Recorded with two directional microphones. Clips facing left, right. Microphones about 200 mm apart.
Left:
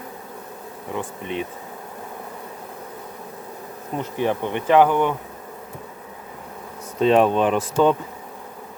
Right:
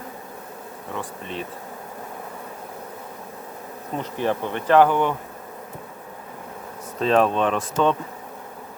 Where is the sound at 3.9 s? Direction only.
15° left (ahead or behind).